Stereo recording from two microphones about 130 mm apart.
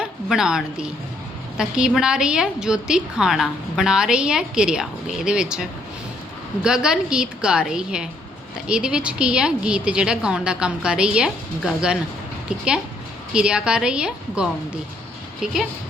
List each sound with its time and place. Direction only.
0.0 s a woman's voice: 5° right (ahead or behind)